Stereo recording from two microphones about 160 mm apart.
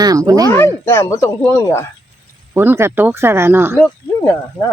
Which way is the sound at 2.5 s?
15° right (ahead or behind).